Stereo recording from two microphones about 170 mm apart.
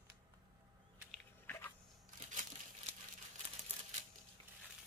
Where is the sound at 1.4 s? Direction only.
10° left (ahead or behind).